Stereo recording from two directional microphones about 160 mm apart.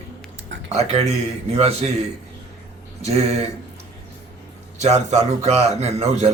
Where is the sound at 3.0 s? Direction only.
40° right (ahead or behind).